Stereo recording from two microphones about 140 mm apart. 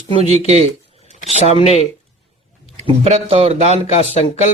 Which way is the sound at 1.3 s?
50° left (ahead or behind).